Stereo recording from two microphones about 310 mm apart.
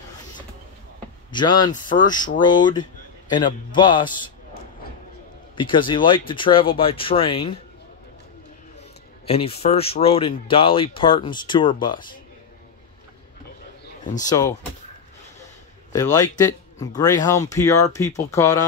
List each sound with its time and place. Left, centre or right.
1.3 s speech: centre
5.6 s speech: centre
9.2 s speech: centre
14.2 s speech: centre
15.9 s speech: centre